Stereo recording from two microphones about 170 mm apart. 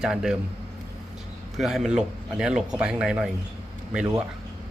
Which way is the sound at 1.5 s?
Centre (ahead or behind).